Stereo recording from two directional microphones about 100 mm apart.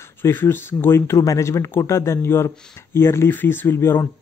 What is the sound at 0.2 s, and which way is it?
Speech, 20° left (ahead or behind).